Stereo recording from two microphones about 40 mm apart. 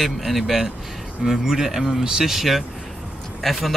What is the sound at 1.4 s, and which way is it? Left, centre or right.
Speech, centre.